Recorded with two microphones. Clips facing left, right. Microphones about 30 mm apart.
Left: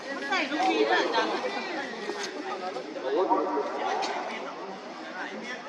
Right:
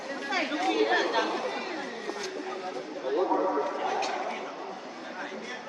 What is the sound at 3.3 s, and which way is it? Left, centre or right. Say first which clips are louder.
Chatter: left 1 dB; left.